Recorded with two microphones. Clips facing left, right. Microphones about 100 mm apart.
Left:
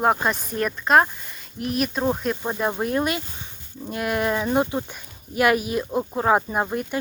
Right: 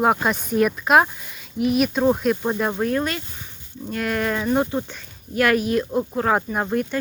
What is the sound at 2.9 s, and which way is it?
Speech, 10° left (ahead or behind).